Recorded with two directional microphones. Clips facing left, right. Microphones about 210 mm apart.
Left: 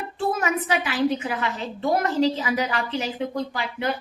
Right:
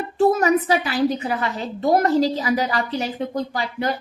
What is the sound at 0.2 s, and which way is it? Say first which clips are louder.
A woman's voice: right 8 dB; 40° right (ahead or behind).